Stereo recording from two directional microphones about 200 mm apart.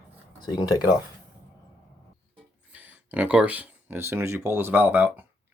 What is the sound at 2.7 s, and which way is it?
Speech, 10° right (ahead or behind).